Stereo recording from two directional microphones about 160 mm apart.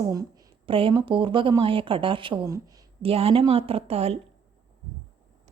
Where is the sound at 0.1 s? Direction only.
25° right (ahead or behind); by 4.2 s 40° right (ahead or behind).